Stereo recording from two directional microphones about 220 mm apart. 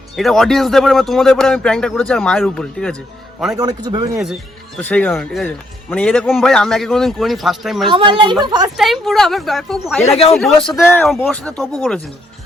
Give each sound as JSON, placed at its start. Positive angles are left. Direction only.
{"t": 0.2, "sound": "a man's voice", "side_deg": 0}
{"t": 3.6, "sound": "a man's voice", "side_deg": -15}
{"t": 4.8, "sound": "a man's voice", "side_deg": 5}
{"t": 7.9, "sound": "a woman's voice", "side_deg": -20}
{"t": 8.8, "sound": "a man's voice", "side_deg": 0}